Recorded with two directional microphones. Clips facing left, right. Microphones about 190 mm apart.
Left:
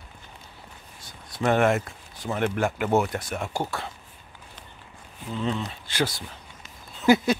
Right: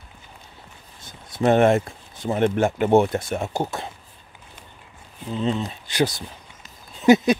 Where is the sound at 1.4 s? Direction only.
25° right (ahead or behind).